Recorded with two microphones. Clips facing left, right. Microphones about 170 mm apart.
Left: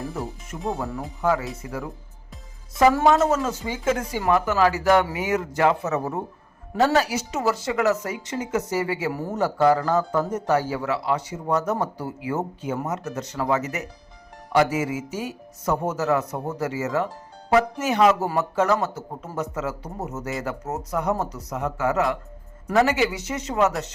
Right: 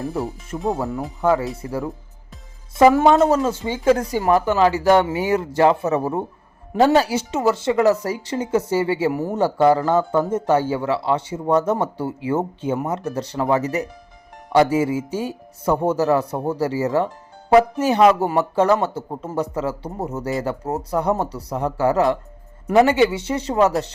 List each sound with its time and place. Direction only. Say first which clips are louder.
0.1 s music: right 6 dB; 30° right (ahead or behind)
0.8 s speech: right 4 dB; 20° right (ahead or behind)
2.7 s speech: right 4 dB; 25° right (ahead or behind)
22.6 s speech: right 5 dB; 20° right (ahead or behind)
22.9 s speech: right 6 dB; 30° right (ahead or behind)